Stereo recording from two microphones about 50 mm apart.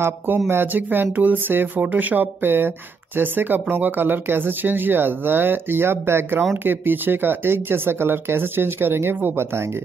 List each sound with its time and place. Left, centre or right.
0.5 s speech: right
6.6 s speech: right